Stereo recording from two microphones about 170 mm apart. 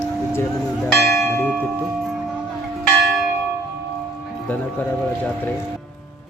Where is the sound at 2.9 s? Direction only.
Centre (ahead or behind).